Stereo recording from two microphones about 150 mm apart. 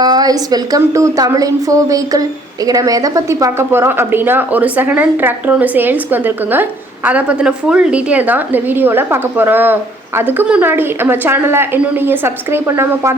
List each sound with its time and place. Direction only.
0.0 s a woman's voice: 25° right (ahead or behind)